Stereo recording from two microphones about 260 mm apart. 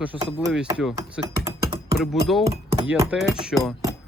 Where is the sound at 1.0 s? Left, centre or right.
Centre.